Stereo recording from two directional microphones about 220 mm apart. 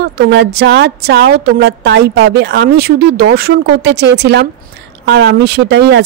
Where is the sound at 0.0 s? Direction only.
50° right (ahead or behind).